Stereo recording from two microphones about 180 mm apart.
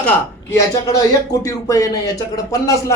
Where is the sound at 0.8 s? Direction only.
20° left (ahead or behind).